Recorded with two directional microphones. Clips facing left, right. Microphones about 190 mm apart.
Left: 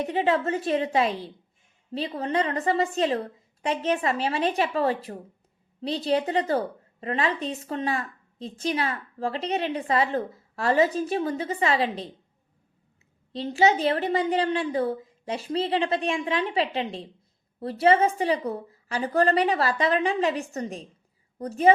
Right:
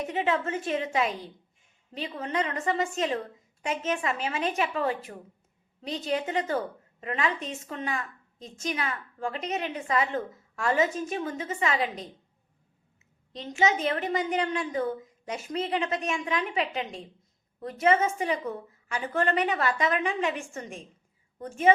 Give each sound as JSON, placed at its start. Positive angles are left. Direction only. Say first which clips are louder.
{"t": 0.0, "sound": "a woman's voice", "louder": "left 4 dB", "side_deg": 35}
{"t": 13.3, "sound": "a woman's voice", "louder": "left 4 dB", "side_deg": 35}